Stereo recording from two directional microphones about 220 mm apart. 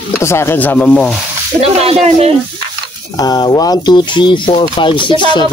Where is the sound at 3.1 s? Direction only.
15° left (ahead or behind).